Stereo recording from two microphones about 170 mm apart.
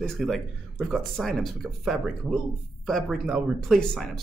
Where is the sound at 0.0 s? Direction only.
Centre (ahead or behind).